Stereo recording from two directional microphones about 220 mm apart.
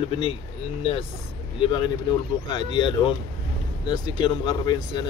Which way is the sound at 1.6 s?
20° left (ahead or behind).